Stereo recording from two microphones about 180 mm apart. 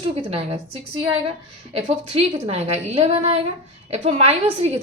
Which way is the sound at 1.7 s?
35° right (ahead or behind).